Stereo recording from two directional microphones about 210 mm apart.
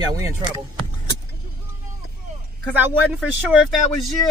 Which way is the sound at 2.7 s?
10° right (ahead or behind).